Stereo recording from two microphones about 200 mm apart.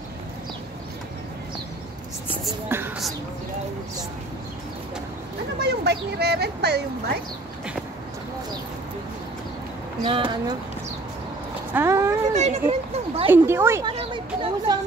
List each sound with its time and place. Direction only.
2.7 s a sound: 10° right (ahead or behind)
5.6 s speech: 55° right (ahead or behind)
10.0 s speech: 25° right (ahead or behind)
11.7 s vehicle: 15° right (ahead or behind)
12.3 s speech: 35° right (ahead or behind)
13.3 s speech: 10° right (ahead or behind)
13.8 s a sound: 25° right (ahead or behind)